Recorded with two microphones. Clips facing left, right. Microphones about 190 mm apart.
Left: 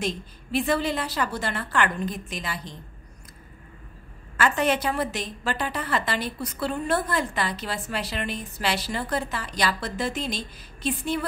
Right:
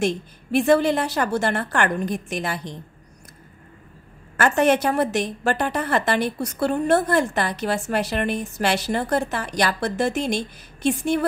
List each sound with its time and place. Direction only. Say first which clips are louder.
0.6 s a woman's voice: right 7 dB; 50° right (ahead or behind)
4.4 s a woman's voice: right 5 dB; 50° right (ahead or behind); by 5.3 s 70° right (ahead or behind)
5.4 s a woman's voice: right 3 dB; 50° right (ahead or behind); by 8.5 s 65° right (ahead or behind)
8.5 s a woman's voice: right 4 dB; 50° right (ahead or behind)